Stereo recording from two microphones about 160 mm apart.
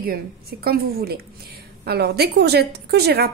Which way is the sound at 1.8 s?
90° right.